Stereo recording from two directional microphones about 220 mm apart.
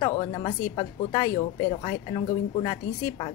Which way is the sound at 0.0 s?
20° left (ahead or behind).